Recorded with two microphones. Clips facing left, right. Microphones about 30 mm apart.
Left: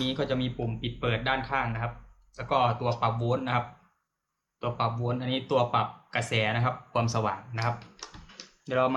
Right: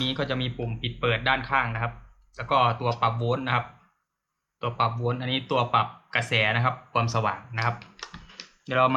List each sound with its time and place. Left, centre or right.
0.0 s speech: right